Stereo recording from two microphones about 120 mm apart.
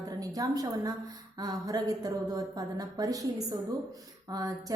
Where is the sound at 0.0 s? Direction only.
30° right (ahead or behind).